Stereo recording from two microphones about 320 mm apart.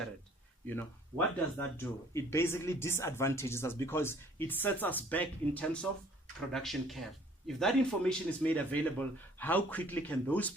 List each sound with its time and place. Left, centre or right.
0.7 s a man's voice: centre